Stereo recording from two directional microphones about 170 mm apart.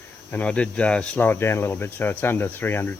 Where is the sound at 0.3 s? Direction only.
10° left (ahead or behind).